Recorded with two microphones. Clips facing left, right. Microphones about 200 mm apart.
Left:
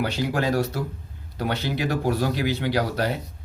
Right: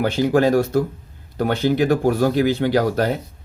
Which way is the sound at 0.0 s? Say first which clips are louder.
Right 8 dB; 50° right (ahead or behind).